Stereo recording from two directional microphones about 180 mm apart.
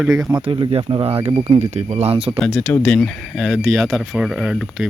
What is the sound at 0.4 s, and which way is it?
Speech, 30° right (ahead or behind).